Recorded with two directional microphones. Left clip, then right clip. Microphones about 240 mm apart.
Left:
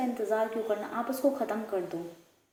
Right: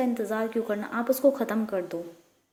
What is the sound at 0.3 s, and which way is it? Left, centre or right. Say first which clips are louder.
A woman's voice: right 1 dB; right.